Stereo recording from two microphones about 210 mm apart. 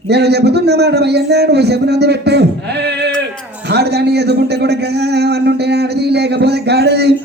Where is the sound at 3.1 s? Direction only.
5° left (ahead or behind).